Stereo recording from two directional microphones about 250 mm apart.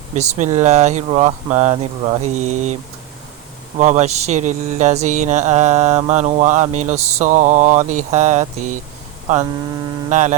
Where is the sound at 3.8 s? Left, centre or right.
Right.